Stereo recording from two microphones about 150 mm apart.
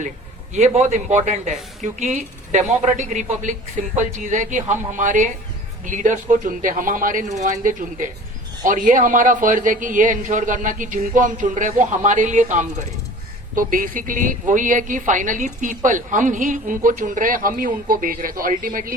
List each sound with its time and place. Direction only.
0.5 s a man's voice: 55° right (ahead or behind)
13.6 s a woman's voice: 65° right (ahead or behind)